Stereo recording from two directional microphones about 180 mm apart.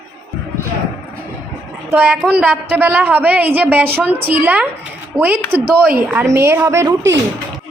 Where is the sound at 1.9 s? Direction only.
10° right (ahead or behind).